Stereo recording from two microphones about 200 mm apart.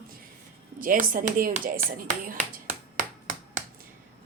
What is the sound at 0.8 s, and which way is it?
Speech, 45° right (ahead or behind).